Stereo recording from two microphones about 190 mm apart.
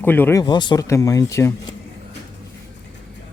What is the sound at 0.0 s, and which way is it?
Speech, 10° left (ahead or behind).